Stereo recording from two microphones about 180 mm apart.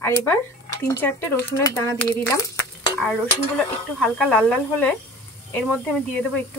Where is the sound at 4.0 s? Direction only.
5° left (ahead or behind).